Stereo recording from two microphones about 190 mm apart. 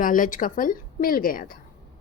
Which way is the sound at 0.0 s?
45° left (ahead or behind).